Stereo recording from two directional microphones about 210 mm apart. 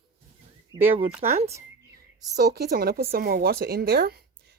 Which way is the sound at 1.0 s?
30° right (ahead or behind).